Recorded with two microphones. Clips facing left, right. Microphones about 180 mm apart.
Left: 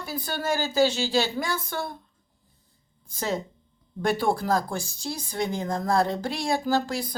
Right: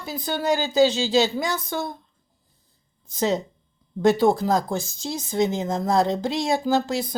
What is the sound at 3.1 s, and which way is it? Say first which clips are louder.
Speech: right 6 dB; 20° right (ahead or behind).